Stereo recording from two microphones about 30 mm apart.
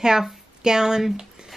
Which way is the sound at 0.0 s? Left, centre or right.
Centre.